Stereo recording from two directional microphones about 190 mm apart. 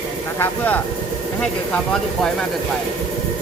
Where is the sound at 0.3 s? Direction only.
10° left (ahead or behind).